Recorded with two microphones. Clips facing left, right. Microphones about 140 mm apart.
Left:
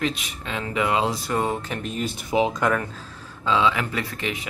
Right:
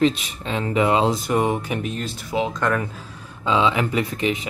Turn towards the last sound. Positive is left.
turn(degrees=-20)  # may be behind; listen again after turning